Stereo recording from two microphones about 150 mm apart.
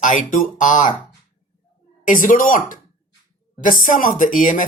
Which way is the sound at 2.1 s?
60° left (ahead or behind).